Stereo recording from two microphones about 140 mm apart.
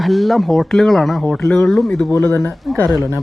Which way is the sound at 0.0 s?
Centre (ahead or behind).